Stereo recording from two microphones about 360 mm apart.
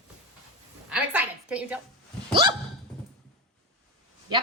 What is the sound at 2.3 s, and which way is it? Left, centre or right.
Hiccup, centre.